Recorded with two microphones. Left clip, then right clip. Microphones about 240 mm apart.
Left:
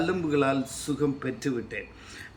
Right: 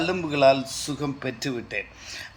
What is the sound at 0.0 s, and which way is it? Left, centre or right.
Speech, centre.